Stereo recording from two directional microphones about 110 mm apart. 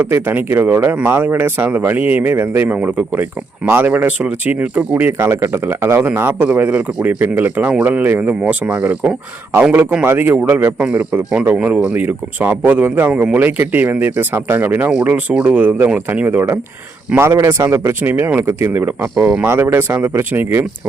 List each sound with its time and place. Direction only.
0.0 s speech: 20° right (ahead or behind)